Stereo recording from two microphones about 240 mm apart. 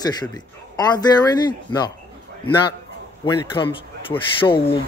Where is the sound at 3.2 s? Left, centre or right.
Centre.